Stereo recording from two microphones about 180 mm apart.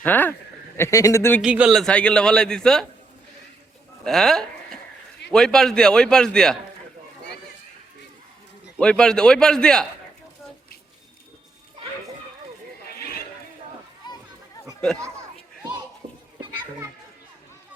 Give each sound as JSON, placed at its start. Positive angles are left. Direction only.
{"t": 0.0, "sound": "speech", "side_deg": 10}
{"t": 1.4, "sound": "a man's voice", "side_deg": -5}
{"t": 4.0, "sound": "a man's voice", "side_deg": 0}
{"t": 8.8, "sound": "a man's voice", "side_deg": 5}